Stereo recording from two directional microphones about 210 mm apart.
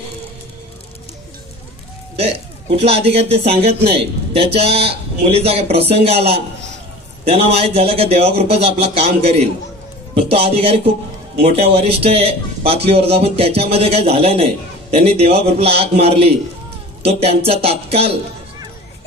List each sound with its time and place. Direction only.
2.8 s a man's voice: 30° right (ahead or behind)